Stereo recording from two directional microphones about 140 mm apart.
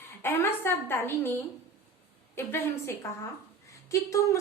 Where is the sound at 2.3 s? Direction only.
15° left (ahead or behind).